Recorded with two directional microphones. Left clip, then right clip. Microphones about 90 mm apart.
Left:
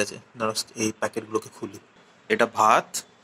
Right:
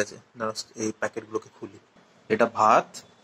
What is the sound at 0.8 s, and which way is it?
Speech, 35° left (ahead or behind).